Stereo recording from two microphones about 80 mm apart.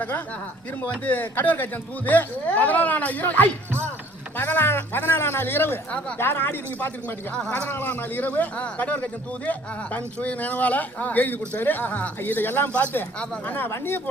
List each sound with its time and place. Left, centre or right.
1.0 s speech: left